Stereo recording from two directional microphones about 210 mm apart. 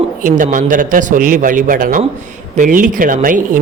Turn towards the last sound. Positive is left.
turn(degrees=-40)  # may be behind; listen again after turning